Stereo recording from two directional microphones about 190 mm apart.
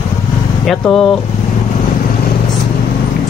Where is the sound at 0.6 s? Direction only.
Centre (ahead or behind).